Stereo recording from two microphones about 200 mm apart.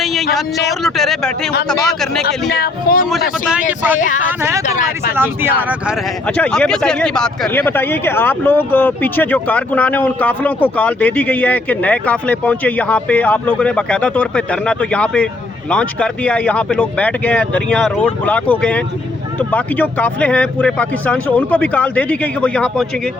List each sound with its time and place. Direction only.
0.0 s a sound: centre (ahead or behind)
0.7 s speech: centre (ahead or behind)
2.2 s speech: 50° left (ahead or behind)
3.1 s speech: 5° right (ahead or behind)
4.0 s speech: 40° left (ahead or behind)
4.3 s speech: 10° right (ahead or behind)
4.6 s speech: 40° left (ahead or behind)
5.1 s speech: 10° right (ahead or behind)
6.2 s speech: 5° left (ahead or behind)